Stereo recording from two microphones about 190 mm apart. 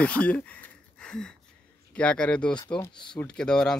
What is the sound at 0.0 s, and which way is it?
Speech, 5° left (ahead or behind).